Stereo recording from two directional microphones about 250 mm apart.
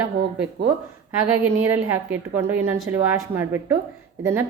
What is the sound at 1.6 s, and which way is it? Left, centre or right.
Speech, right.